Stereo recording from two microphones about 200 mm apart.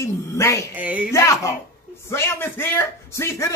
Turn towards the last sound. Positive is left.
turn(degrees=15)  # may be behind; listen again after turning